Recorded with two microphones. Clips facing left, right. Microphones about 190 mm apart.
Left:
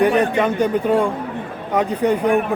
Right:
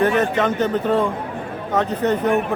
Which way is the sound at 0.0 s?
10° left (ahead or behind).